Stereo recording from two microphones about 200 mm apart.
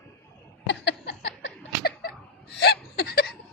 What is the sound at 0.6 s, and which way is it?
Laughter, 60° left (ahead or behind).